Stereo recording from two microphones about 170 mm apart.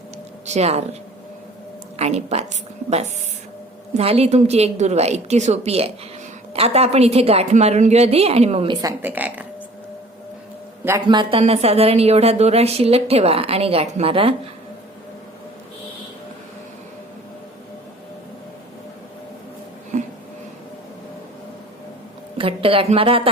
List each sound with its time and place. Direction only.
0.4 s speech: 40° right (ahead or behind)
2.0 s speech: 40° right (ahead or behind)
3.9 s speech: 35° right (ahead or behind); by 9.5 s 10° right (ahead or behind)
10.8 s speech: 20° right (ahead or behind)
22.4 s speech: 30° right (ahead or behind)